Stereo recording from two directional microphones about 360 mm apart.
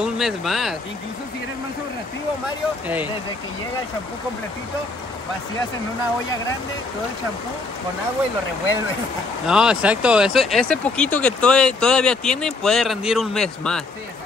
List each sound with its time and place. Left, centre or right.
0.0 s speech: centre
2.4 s speech: centre
9.5 s speech: centre